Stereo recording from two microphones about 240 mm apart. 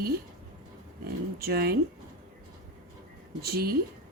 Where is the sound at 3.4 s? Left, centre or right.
Right.